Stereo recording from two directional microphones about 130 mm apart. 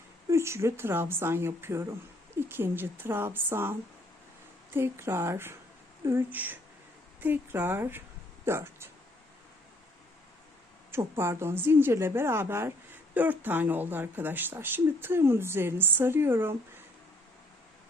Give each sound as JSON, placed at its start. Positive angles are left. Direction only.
{"t": 0.3, "sound": "a woman's voice", "side_deg": -20}
{"t": 10.9, "sound": "a woman's voice", "side_deg": -20}